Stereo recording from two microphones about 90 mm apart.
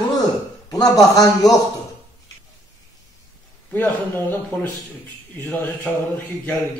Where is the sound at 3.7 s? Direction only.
20° left (ahead or behind).